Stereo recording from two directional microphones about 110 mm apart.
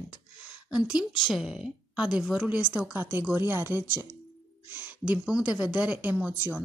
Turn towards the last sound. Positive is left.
turn(degrees=-15)  # may be behind; listen again after turning